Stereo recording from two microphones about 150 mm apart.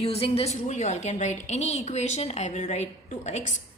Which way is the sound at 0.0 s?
40° left (ahead or behind).